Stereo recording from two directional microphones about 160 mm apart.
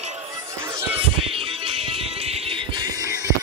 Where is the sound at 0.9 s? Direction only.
35° right (ahead or behind).